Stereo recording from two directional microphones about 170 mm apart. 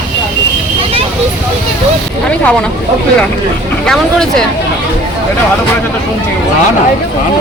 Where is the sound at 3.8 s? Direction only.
5° left (ahead or behind).